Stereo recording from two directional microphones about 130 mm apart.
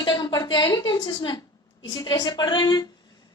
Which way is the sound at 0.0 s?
35° left (ahead or behind).